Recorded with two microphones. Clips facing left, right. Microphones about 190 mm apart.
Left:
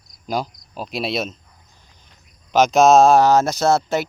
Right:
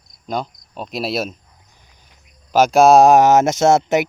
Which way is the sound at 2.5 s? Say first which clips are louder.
Right 2 dB; 5° right (ahead or behind).